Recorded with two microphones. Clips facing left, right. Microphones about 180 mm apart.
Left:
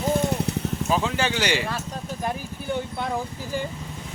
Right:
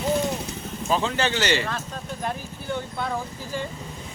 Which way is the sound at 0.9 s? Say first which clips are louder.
Right 2 dB; 10° left (ahead or behind).